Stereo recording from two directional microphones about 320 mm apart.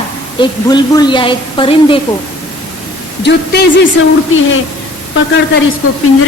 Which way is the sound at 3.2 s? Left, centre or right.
Left.